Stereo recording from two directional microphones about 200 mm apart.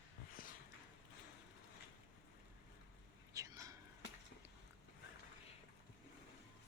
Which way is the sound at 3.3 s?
15° right (ahead or behind).